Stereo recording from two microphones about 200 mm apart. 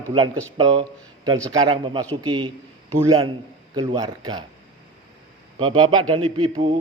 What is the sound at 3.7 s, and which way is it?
Speech, 20° right (ahead or behind).